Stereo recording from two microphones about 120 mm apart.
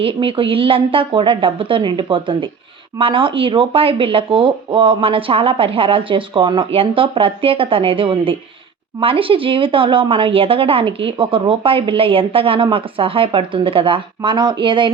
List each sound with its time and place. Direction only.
0.0 s speech: 50° right (ahead or behind)